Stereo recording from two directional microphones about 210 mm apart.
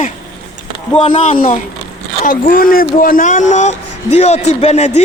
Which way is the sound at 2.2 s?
40° left (ahead or behind).